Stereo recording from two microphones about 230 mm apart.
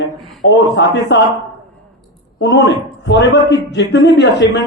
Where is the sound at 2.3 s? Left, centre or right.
Left.